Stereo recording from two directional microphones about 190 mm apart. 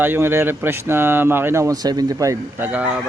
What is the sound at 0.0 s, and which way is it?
Speech, 10° right (ahead or behind).